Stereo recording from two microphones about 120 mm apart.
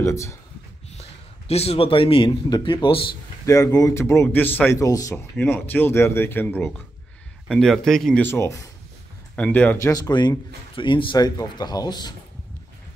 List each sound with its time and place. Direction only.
0.0 s speech: 25° left (ahead or behind)
1.5 s speech: 60° left (ahead or behind)
3.4 s speech: 25° left (ahead or behind)
4.7 s speech: 30° left (ahead or behind)
5.1 s speech: 15° left (ahead or behind)
7.4 s speech: centre (ahead or behind)
8.2 s speech: 20° left (ahead or behind)
9.3 s speech: 10° left (ahead or behind)
9.8 s speech: 30° left (ahead or behind)